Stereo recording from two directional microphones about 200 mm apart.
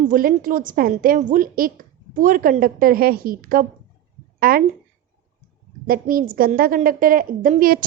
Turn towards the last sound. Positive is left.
turn(degrees=-45)  # may be behind; listen again after turning